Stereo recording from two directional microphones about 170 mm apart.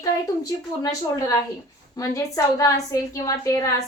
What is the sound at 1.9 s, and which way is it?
A woman's voice, 20° left (ahead or behind).